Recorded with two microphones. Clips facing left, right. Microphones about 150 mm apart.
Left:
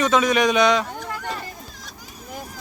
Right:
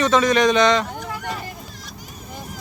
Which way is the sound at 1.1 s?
10° right (ahead or behind).